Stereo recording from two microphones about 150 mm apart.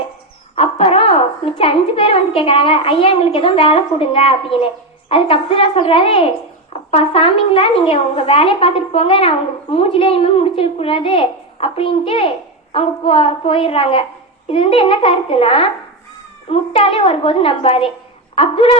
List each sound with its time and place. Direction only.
0.5 s a woman's voice: 40° left (ahead or behind)